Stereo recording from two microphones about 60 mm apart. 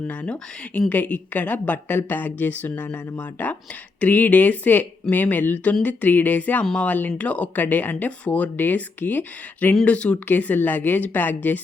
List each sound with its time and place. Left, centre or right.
0.1 s a woman's voice: left
9.8 s a woman's voice: left
10.2 s speech: left